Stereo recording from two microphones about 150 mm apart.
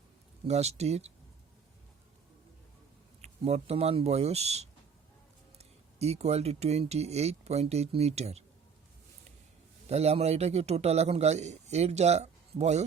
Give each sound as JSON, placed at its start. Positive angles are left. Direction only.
{"t": 0.4, "sound": "a man's voice", "side_deg": -45}
{"t": 3.2, "sound": "speech", "side_deg": -45}
{"t": 9.9, "sound": "a man's voice", "side_deg": -45}